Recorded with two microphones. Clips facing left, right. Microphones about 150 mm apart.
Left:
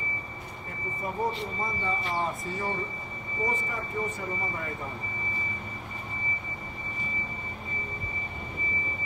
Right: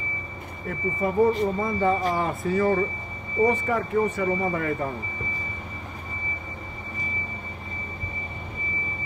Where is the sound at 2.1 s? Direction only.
75° right (ahead or behind).